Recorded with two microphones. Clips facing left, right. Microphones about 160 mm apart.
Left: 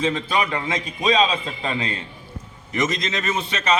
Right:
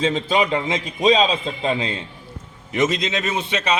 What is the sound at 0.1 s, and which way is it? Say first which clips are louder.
A man's voice: right 4 dB; 25° right (ahead or behind).